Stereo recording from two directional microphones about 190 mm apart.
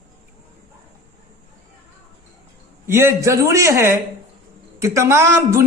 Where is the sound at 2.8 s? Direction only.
15° right (ahead or behind).